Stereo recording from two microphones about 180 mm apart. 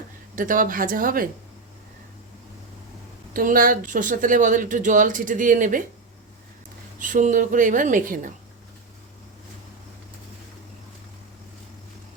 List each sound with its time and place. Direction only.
0.3 s speech: 50° right (ahead or behind)
3.3 s speech: 50° right (ahead or behind)
7.0 s speech: 45° right (ahead or behind)